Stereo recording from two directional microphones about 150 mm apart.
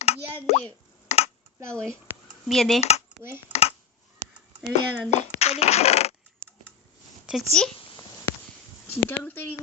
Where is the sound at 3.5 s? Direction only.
45° left (ahead or behind).